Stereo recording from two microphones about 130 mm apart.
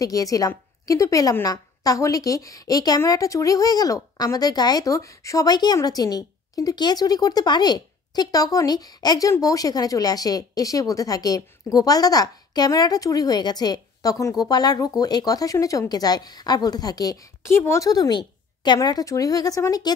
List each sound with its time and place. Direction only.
0.0 s speech: 25° left (ahead or behind)